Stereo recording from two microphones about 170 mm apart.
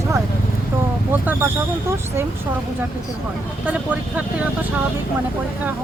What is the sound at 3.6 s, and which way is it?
Speech, 10° right (ahead or behind).